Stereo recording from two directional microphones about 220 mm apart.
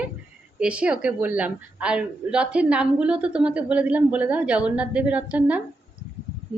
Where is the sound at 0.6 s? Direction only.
5° right (ahead or behind).